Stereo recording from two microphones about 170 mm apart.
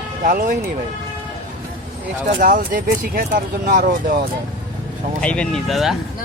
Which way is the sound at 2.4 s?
50° right (ahead or behind).